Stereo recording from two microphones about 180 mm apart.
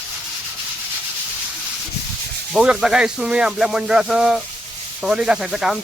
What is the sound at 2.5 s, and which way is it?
Speech, 5° right (ahead or behind).